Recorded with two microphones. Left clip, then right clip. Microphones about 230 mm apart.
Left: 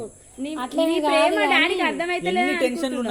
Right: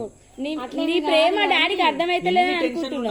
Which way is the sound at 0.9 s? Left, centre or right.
Right.